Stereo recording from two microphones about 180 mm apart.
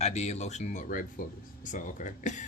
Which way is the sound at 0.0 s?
35° left (ahead or behind).